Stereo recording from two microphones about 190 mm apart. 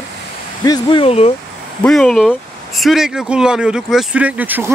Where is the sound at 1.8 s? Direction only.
5° left (ahead or behind).